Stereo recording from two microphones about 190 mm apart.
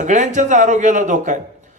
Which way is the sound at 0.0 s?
40° right (ahead or behind).